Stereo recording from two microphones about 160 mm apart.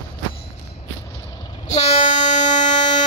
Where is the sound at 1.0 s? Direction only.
20° left (ahead or behind).